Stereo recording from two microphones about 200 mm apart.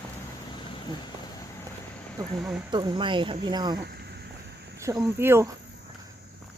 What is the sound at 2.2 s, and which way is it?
Speech, 20° right (ahead or behind).